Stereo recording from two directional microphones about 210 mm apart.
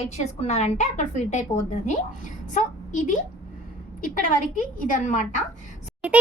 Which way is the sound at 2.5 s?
35° left (ahead or behind).